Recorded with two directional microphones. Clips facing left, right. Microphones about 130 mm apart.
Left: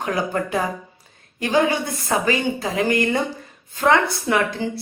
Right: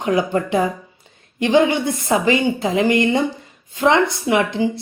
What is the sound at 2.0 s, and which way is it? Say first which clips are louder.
A woman's voice: right 3 dB; 25° right (ahead or behind).